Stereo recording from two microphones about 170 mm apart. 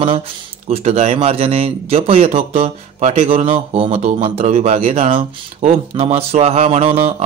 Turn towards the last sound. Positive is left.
turn(degrees=-35)  # may be behind; listen again after turning